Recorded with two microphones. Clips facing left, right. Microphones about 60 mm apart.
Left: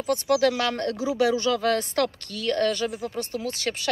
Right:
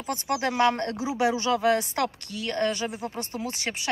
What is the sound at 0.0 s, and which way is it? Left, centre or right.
Speech, right.